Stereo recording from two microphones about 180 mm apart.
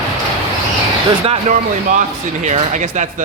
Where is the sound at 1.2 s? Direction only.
35° right (ahead or behind).